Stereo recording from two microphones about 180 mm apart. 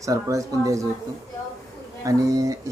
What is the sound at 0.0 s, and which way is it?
Speech, 20° right (ahead or behind).